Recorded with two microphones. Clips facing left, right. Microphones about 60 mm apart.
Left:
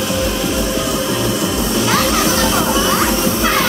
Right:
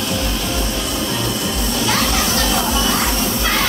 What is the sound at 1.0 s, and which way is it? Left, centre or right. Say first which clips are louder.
Children playing: left 4 dB; centre.